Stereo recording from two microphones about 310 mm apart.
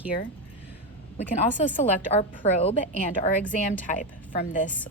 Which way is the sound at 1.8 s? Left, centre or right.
Left.